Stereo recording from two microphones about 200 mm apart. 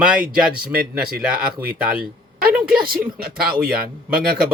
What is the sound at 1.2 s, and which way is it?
Speech, 5° right (ahead or behind).